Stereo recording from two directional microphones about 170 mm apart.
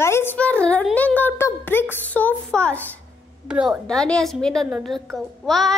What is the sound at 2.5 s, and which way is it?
Speech, 5° left (ahead or behind).